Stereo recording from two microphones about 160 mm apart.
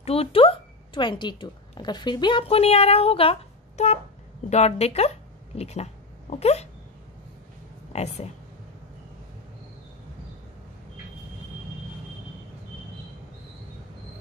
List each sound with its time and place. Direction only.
0.0 s a woman's voice: 40° left (ahead or behind)
7.9 s speech: 40° left (ahead or behind)